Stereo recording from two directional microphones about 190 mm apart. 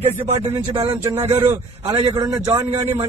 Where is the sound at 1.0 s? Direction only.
15° right (ahead or behind).